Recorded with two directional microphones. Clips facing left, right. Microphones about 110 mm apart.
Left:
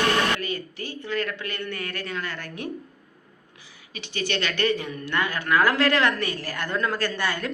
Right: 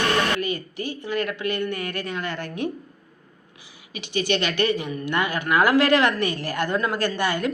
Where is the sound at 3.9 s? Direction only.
15° right (ahead or behind).